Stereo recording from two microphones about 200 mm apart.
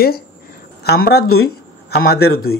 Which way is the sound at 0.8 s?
50° left (ahead or behind).